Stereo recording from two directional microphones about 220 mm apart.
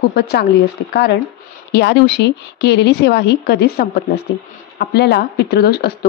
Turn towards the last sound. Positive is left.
turn(degrees=45)  # may be behind; listen again after turning